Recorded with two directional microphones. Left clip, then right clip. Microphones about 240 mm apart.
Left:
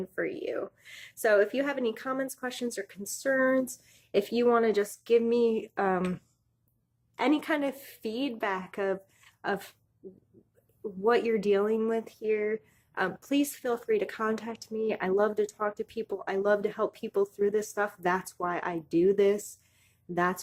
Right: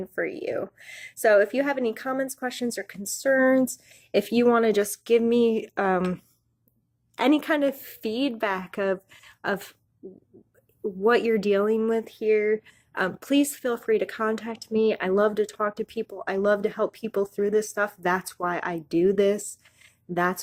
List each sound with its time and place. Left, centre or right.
0.0 s speech: right
7.2 s speech: right
11.0 s speech: right